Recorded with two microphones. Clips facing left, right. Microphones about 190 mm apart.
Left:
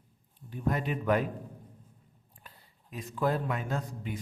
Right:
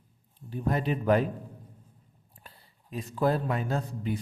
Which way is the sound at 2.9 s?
35° right (ahead or behind).